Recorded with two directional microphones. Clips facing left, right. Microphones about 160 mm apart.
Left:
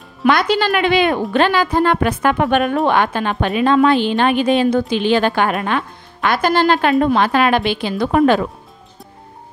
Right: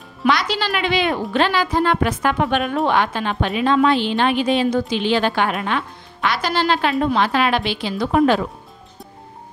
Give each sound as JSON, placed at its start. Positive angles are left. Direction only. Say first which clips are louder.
{"t": 0.3, "sound": "a woman's voice", "louder": "left 5 dB", "side_deg": 50}